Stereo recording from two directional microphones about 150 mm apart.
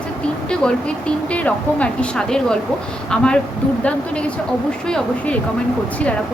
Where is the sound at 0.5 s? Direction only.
5° left (ahead or behind).